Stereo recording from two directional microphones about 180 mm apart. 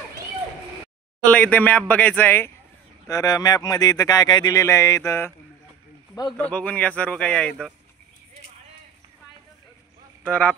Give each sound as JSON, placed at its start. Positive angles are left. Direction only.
{"t": 1.2, "sound": "speech", "side_deg": 10}
{"t": 6.3, "sound": "speech", "side_deg": 5}